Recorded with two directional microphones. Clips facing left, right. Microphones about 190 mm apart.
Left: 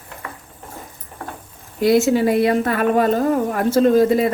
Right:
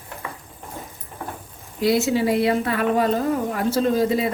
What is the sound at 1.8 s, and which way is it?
A woman's voice, 50° left (ahead or behind).